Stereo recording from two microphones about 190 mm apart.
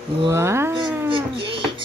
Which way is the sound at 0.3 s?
15° right (ahead or behind).